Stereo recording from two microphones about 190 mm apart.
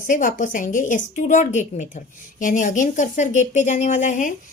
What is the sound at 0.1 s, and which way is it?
A woman's voice, 45° left (ahead or behind).